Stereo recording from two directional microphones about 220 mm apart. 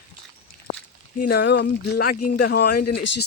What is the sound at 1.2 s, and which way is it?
Speech, 45° left (ahead or behind).